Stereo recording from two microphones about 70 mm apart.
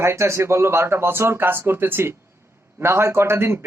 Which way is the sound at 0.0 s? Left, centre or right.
Right.